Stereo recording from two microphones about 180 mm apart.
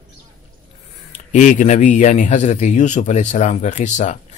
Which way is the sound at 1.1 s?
45° left (ahead or behind).